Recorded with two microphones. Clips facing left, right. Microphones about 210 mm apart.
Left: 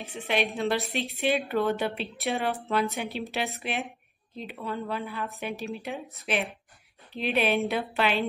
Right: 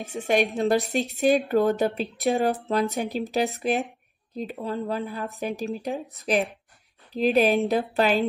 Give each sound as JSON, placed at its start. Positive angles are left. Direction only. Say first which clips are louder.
{"t": 0.0, "sound": "a woman's voice", "louder": "right 5 dB", "side_deg": -45}